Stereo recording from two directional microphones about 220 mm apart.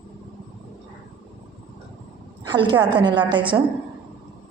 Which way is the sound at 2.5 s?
20° right (ahead or behind).